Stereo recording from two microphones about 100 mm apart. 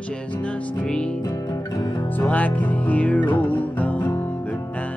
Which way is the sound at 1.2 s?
35° left (ahead or behind).